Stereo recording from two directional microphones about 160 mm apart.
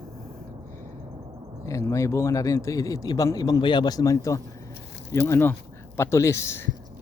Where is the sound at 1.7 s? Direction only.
20° left (ahead or behind).